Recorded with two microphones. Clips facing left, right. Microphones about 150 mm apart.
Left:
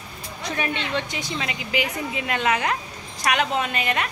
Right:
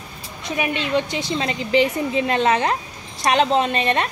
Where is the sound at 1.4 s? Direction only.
30° right (ahead or behind).